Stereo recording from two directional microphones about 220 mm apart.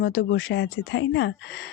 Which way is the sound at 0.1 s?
60° left (ahead or behind).